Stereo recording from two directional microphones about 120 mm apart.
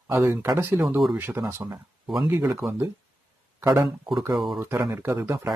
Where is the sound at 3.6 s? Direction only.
35° right (ahead or behind).